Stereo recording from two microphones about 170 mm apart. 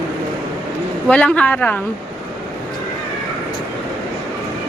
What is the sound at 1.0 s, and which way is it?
Speech, 5° left (ahead or behind).